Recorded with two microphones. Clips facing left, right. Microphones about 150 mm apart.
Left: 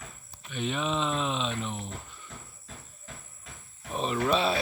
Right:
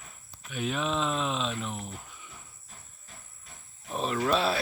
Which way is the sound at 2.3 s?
90° left.